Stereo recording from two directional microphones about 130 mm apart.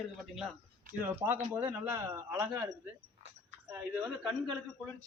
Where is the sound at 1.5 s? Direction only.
15° right (ahead or behind).